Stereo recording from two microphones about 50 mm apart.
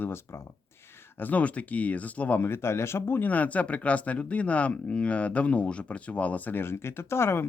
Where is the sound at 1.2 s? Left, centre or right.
Left.